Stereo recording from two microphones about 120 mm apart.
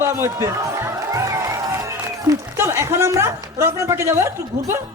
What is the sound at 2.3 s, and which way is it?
A woman's voice, 20° right (ahead or behind).